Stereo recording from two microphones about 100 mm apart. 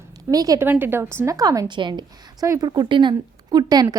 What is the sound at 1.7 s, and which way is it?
Speech, 50° right (ahead or behind).